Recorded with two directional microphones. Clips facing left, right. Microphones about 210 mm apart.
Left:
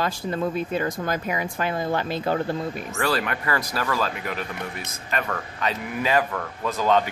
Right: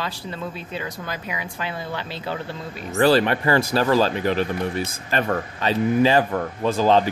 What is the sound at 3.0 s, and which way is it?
Speech, 30° right (ahead or behind).